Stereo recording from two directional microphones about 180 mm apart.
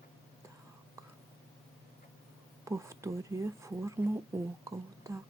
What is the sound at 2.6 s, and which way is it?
Speech, 15° right (ahead or behind).